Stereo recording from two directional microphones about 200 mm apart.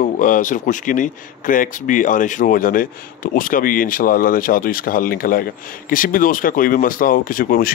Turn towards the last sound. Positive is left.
turn(degrees=45)  # may be behind; listen again after turning